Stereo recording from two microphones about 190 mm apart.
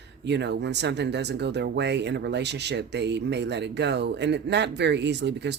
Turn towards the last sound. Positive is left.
turn(degrees=-65)  # may be behind; listen again after turning